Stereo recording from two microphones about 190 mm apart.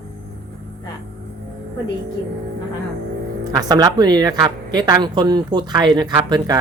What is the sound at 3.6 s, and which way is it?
A woman's voice, 20° right (ahead or behind).